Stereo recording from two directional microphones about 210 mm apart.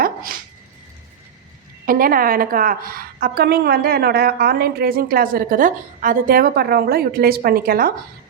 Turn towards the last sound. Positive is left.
turn(degrees=-45)  # may be behind; listen again after turning